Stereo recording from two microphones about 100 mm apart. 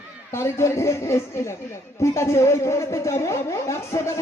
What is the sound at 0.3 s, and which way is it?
Speech, 25° left (ahead or behind).